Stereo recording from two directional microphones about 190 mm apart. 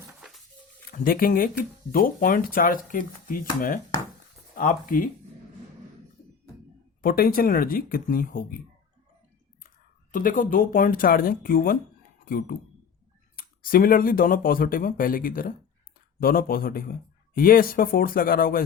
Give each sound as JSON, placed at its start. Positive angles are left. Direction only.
{"t": 0.9, "sound": "speech", "side_deg": 50}
{"t": 7.0, "sound": "speech", "side_deg": 50}
{"t": 10.1, "sound": "speech", "side_deg": 45}